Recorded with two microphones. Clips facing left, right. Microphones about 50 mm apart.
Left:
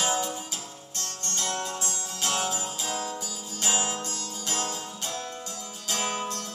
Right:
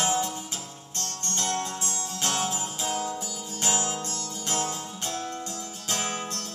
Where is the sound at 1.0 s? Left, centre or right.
Right.